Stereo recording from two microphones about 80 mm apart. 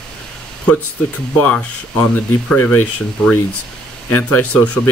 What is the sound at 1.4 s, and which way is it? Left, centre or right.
Speech, centre.